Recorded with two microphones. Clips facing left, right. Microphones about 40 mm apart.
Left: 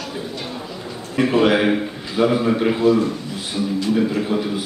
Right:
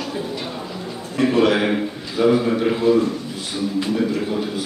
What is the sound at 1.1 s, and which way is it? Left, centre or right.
A man's voice, centre.